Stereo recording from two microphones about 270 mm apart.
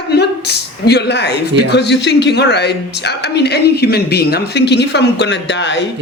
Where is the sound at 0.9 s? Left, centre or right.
Left.